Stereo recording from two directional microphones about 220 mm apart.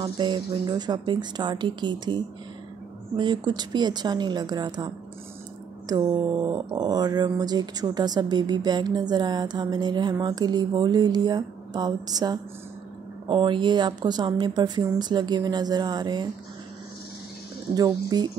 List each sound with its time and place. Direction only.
0.0 s speech: 20° right (ahead or behind)
17.7 s speech: 20° right (ahead or behind)